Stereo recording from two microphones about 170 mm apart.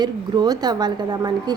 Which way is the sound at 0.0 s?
25° right (ahead or behind).